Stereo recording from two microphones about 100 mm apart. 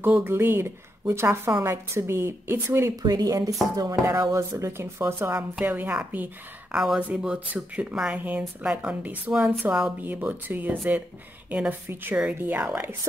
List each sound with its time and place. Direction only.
0.0 s speech: 20° right (ahead or behind)
3.0 s speech: 40° right (ahead or behind); by 9.9 s 5° right (ahead or behind)
10.0 s speech: 20° right (ahead or behind)
11.9 s speech: 20° right (ahead or behind)